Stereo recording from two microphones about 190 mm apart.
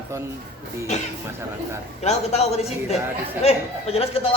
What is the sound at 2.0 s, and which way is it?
A woman's voice, 35° left (ahead or behind).